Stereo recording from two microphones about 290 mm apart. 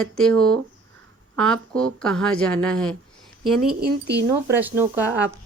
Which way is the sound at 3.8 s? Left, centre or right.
Right.